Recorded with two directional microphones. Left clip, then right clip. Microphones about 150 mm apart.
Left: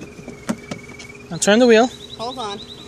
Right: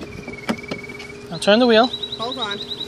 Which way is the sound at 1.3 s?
80° left.